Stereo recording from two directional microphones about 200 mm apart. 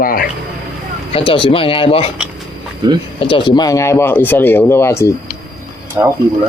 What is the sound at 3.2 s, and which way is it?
Speech, 25° left (ahead or behind).